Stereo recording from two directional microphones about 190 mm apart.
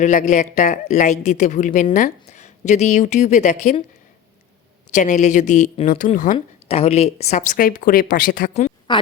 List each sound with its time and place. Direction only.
0.0 s speech: 40° left (ahead or behind)
4.9 s speech: 40° left (ahead or behind)
6.3 s speech: 30° left (ahead or behind)